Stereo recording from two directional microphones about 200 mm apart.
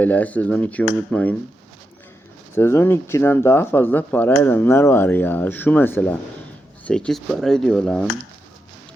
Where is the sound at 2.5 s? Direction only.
10° left (ahead or behind).